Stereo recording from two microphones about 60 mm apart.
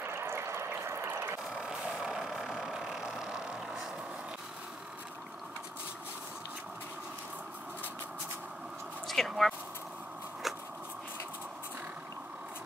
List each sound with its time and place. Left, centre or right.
0.0 s water: right
1.5 s vehicle: centre
9.0 s speech: centre
10.4 s a sound: centre